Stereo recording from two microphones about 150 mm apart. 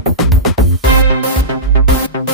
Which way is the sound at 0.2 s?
Centre (ahead or behind).